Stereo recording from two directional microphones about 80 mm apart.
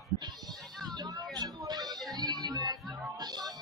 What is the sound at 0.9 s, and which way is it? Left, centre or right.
Music, right.